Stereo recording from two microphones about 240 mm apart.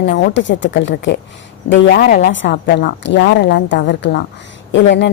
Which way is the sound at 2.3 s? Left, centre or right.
Left.